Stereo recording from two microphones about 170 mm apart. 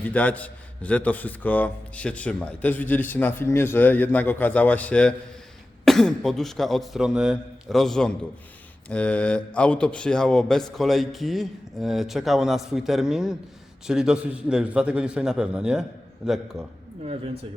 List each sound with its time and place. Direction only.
0.0 s a man's voice: 10° left (ahead or behind)
17.0 s speech: 35° right (ahead or behind)